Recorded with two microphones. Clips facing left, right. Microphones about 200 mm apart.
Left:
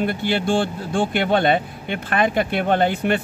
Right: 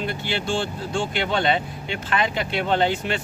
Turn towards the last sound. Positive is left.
turn(degrees=55)  # may be behind; listen again after turning